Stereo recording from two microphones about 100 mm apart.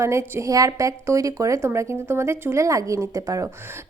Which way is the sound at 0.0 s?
30° right (ahead or behind).